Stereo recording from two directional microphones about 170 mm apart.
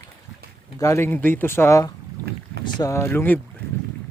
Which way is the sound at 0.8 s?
15° left (ahead or behind).